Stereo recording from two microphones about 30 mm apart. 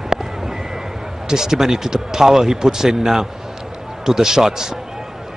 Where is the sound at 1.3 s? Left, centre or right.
Centre.